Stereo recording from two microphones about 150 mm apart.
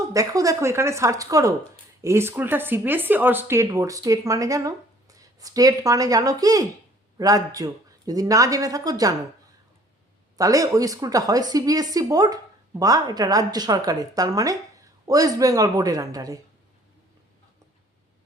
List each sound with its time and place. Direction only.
0.1 s speech: 25° right (ahead or behind)
10.3 s speech: 20° right (ahead or behind)